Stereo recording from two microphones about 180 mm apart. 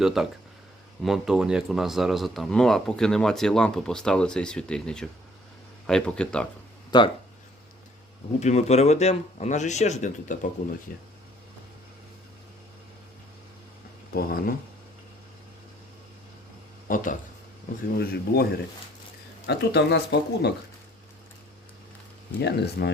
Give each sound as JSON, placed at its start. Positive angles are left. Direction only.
{"t": 0.0, "sound": "speech", "side_deg": 0}
{"t": 6.9, "sound": "speech", "side_deg": 25}
{"t": 8.4, "sound": "speech", "side_deg": 40}
{"t": 14.1, "sound": "a man's voice", "side_deg": 60}
{"t": 16.9, "sound": "speech", "side_deg": 50}
{"t": 17.9, "sound": "a man's voice", "side_deg": 60}
{"t": 19.5, "sound": "speech", "side_deg": 70}
{"t": 22.4, "sound": "a man's voice", "side_deg": 65}